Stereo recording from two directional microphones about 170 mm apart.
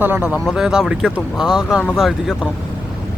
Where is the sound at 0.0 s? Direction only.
10° right (ahead or behind).